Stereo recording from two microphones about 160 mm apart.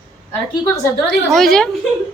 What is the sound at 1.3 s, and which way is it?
Speech, centre (ahead or behind).